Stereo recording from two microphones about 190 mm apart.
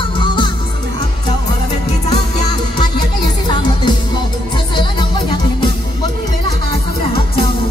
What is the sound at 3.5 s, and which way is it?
Music, 25° left (ahead or behind).